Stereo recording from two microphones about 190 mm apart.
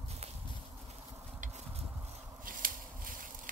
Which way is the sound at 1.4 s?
35° right (ahead or behind).